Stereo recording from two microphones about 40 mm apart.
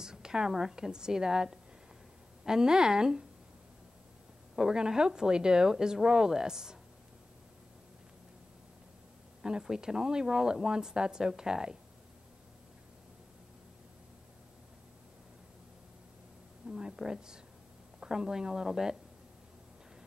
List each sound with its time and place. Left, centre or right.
0.0 s a woman's voice: centre
4.7 s speech: centre
9.4 s speech: centre
16.6 s a sound: right
16.9 s speech: centre